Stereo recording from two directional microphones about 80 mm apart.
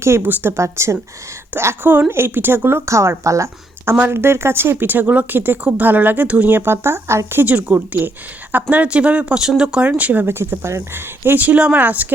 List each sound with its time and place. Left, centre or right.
0.0 s speech: right